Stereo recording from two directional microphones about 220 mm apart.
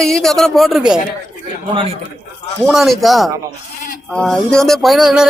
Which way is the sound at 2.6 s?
Centre (ahead or behind).